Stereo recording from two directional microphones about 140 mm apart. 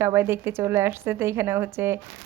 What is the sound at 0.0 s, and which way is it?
A woman's voice, 15° right (ahead or behind).